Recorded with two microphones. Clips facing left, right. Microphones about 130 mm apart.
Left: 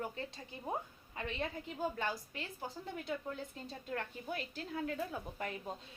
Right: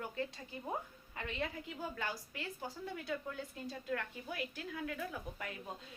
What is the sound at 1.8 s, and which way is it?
Speech, 25° left (ahead or behind).